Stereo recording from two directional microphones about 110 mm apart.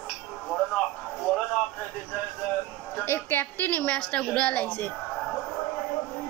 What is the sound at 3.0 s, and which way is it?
A woman's voice, 20° left (ahead or behind).